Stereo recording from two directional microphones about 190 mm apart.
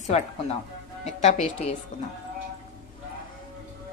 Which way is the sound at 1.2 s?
35° left (ahead or behind).